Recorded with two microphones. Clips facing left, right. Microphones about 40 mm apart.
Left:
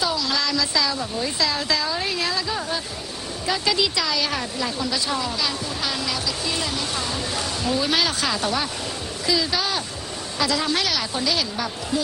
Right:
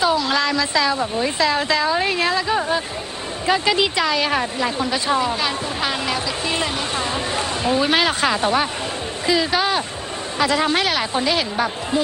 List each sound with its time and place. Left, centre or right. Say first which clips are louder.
0.0 s speech: right 6 dB; right